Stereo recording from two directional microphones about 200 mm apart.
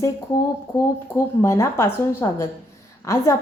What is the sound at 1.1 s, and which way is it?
A woman's voice, 15° left (ahead or behind).